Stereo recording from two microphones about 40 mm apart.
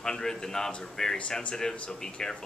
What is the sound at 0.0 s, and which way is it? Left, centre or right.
Speech, centre.